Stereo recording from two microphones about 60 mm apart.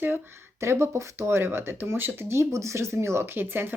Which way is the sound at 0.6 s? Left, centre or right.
Right.